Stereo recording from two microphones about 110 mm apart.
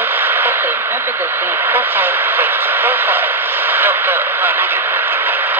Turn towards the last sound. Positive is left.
turn(degrees=-15)  # may be behind; listen again after turning